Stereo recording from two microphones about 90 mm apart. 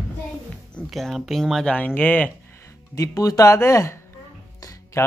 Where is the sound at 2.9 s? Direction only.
40° left (ahead or behind).